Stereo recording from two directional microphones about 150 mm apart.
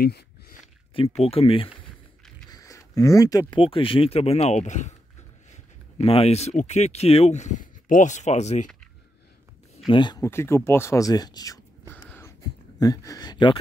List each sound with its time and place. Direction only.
0.0 s a sound: 90° left
0.9 s speech: 40° left (ahead or behind)
2.5 s speech: 20° left (ahead or behind); by 8.6 s 50° left (ahead or behind)
9.8 s speech: 30° left (ahead or behind)
10.2 s speech: 20° left (ahead or behind)
11.9 s a sound: 15° left (ahead or behind)
12.7 s speech: 25° left (ahead or behind)